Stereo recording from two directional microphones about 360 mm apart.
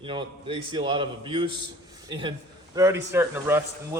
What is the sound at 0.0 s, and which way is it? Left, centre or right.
Speech, centre.